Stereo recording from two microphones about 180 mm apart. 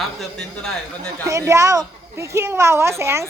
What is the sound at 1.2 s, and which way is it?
A woman's voice, 15° right (ahead or behind).